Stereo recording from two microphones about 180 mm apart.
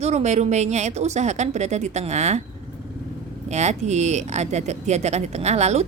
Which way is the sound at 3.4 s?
40° right (ahead or behind).